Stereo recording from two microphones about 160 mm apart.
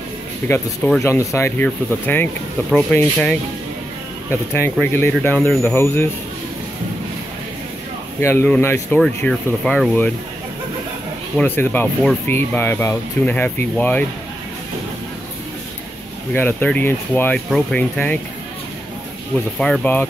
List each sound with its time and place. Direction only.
0.5 s speech: 5° left (ahead or behind)
1.0 s speech: 15° left (ahead or behind)
8.2 s speech: 15° left (ahead or behind)
9.0 s speech: 5° left (ahead or behind)
11.3 s speech: 10° left (ahead or behind)
16.3 s speech: 10° left (ahead or behind)
19.3 s speech: 5° left (ahead or behind)